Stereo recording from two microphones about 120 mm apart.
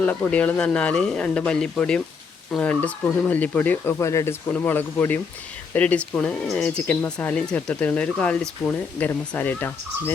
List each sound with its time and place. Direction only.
0.2 s speech: 10° left (ahead or behind)
4.4 s speech: 15° left (ahead or behind)